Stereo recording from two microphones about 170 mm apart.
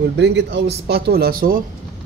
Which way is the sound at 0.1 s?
90° right.